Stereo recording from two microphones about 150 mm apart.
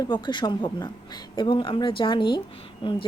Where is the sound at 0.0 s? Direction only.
30° left (ahead or behind).